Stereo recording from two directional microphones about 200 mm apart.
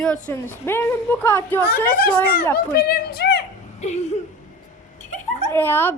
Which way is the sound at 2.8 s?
50° left (ahead or behind).